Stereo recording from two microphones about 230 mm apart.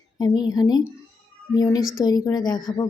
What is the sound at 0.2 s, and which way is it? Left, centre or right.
Speech, centre.